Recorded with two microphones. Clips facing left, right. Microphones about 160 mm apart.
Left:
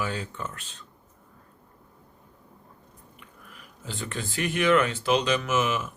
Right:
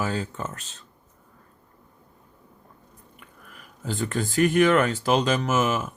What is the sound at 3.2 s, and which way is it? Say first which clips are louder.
Speech: right 1 dB; 45° right (ahead or behind).